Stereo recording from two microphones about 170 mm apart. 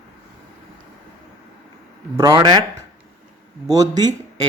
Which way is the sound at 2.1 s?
20° right (ahead or behind).